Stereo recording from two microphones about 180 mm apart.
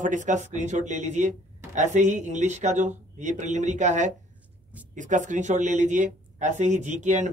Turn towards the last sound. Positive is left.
turn(degrees=-40)  # may be behind; listen again after turning